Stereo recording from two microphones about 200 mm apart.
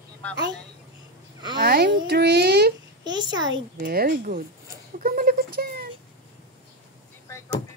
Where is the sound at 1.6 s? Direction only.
50° right (ahead or behind).